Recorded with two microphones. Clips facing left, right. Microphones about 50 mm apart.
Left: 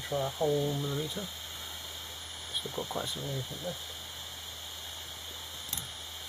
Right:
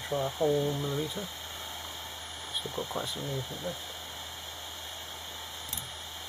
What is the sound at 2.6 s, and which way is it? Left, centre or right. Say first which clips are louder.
Speech: right 1 dB; centre.